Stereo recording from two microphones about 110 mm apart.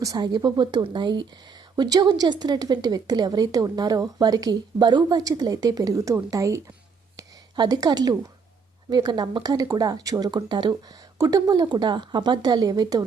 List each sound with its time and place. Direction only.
0.0 s speech: 35° right (ahead or behind)
7.2 s a sound: 40° right (ahead or behind)
8.9 s speech: 40° right (ahead or behind)